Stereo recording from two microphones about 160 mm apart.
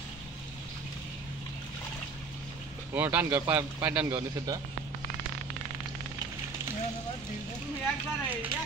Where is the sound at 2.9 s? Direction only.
10° right (ahead or behind).